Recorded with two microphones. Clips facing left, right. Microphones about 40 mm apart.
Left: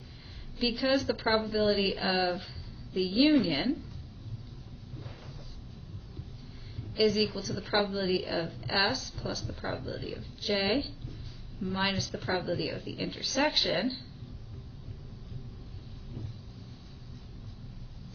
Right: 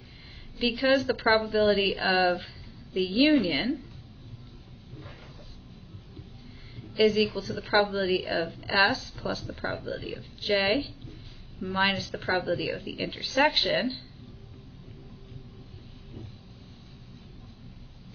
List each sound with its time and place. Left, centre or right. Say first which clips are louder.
0.6 s a woman's voice: right 4 dB; right
6.8 s a woman's voice: right 4 dB; right